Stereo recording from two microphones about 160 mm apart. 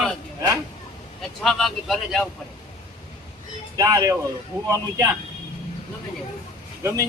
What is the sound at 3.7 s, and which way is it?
Speech, 20° right (ahead or behind).